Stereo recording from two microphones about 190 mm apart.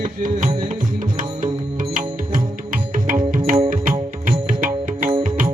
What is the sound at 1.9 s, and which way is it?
Music, 45° right (ahead or behind).